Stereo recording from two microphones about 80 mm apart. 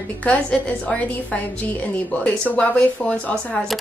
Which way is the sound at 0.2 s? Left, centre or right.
Centre.